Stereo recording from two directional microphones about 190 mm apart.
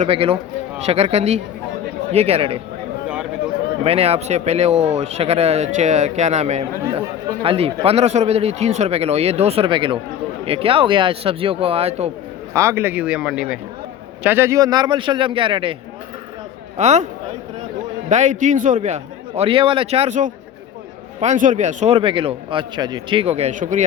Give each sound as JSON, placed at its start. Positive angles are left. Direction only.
{"t": 0.0, "sound": "a man's voice", "side_deg": -30}
{"t": 3.8, "sound": "a man's voice", "side_deg": -30}
{"t": 12.5, "sound": "speech", "side_deg": -15}
{"t": 16.7, "sound": "a man's voice", "side_deg": -35}
{"t": 18.1, "sound": "a man's voice", "side_deg": -40}